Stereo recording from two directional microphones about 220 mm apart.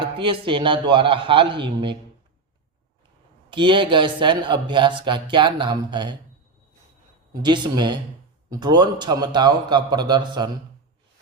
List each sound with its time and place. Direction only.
0.0 s speech: 25° right (ahead or behind)
3.5 s speech: 20° right (ahead or behind)
7.4 s speech: 20° right (ahead or behind)